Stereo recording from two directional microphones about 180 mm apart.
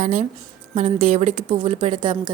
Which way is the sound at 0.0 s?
45° right (ahead or behind).